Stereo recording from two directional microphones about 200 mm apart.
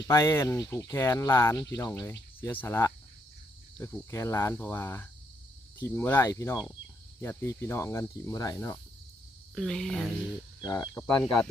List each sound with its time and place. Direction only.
0.0 s speech: 15° left (ahead or behind)
9.6 s speech: 5° left (ahead or behind)
10.6 s speech: 20° left (ahead or behind)